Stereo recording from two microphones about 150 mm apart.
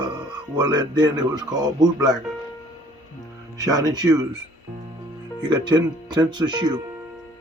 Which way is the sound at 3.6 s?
25° right (ahead or behind).